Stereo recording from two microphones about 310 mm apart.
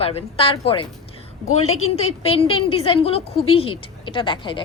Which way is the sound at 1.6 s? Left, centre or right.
Left.